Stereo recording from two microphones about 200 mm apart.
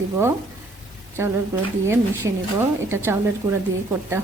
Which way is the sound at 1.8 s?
15° right (ahead or behind).